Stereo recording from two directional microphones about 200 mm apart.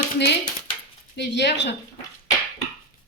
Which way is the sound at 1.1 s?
60° left (ahead or behind).